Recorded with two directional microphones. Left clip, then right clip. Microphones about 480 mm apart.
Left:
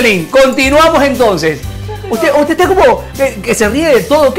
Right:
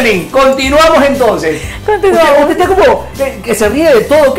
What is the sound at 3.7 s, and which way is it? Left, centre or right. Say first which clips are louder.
Speech: right 3 dB; left.